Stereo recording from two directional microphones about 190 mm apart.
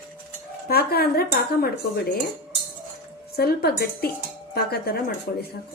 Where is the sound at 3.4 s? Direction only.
55° left (ahead or behind).